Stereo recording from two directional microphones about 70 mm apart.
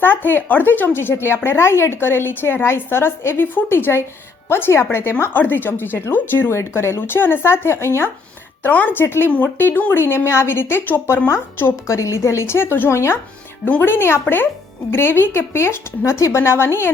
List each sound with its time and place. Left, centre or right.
0.0 s speech: left
6.5 s speech: left
8.6 s speech: left
11.3 s speech: left
13.7 s speech: left